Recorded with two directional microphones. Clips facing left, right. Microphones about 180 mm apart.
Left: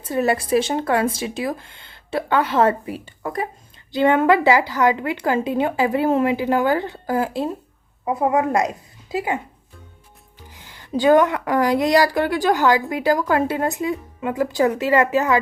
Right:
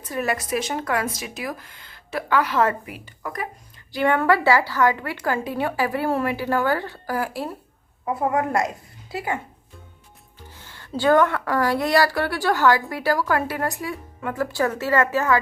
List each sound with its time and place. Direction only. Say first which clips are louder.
0.0 s a woman's voice: left 6 dB; 25° left (ahead or behind)
10.5 s a woman's voice: left 6 dB; 15° left (ahead or behind)